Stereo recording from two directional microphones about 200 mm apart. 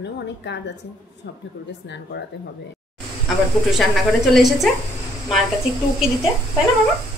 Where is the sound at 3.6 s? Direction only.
Centre (ahead or behind).